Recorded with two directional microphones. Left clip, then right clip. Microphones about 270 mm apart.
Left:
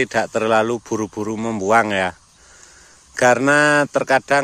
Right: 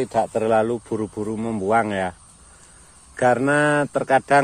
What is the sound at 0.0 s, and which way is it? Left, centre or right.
Speech, left.